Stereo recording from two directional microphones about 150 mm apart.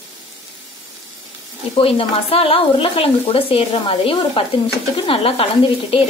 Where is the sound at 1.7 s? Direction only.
40° left (ahead or behind).